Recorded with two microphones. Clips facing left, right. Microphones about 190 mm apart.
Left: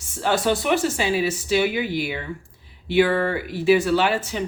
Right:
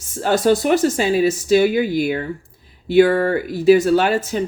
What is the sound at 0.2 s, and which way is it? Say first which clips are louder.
Speech: right 5 dB; 40° right (ahead or behind).